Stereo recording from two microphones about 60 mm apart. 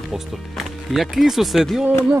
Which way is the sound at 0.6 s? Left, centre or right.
Centre.